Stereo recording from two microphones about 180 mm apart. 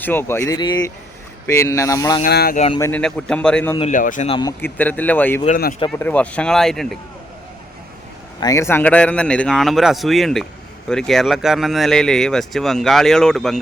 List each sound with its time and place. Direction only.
0.0 s a man's voice: 10° left (ahead or behind)
2.2 s speech: 55° left (ahead or behind)
2.9 s a man's voice: 5° left (ahead or behind)
3.8 s a man's voice: 45° left (ahead or behind)
4.3 s speech: 25° left (ahead or behind)
4.6 s a man's voice: 10° left (ahead or behind)
8.4 s speech: 20° left (ahead or behind); by 13.6 s centre (ahead or behind)